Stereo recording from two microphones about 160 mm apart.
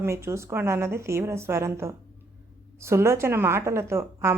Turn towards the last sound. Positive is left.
turn(degrees=-15)  # may be behind; listen again after turning